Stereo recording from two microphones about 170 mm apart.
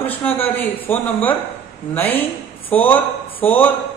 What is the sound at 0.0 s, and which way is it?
A man's voice, 10° left (ahead or behind).